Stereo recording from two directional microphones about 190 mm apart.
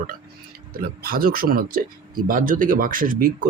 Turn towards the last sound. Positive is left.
turn(degrees=-45)  # may be behind; listen again after turning